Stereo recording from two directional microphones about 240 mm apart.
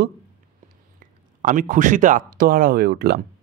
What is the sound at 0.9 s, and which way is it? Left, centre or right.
Speech, right.